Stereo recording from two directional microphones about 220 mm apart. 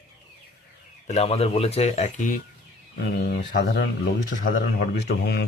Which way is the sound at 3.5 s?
50° left (ahead or behind).